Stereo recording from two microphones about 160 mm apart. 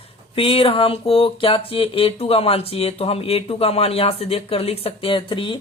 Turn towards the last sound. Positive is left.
turn(degrees=30)  # may be behind; listen again after turning